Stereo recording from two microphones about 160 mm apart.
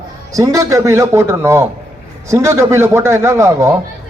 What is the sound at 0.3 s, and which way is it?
A man's voice, 20° right (ahead or behind).